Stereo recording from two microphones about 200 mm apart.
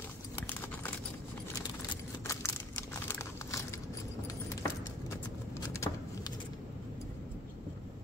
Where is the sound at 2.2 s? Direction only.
15° left (ahead or behind).